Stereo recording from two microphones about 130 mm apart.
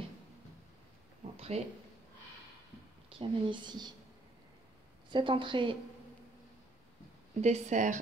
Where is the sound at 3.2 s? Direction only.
35° right (ahead or behind).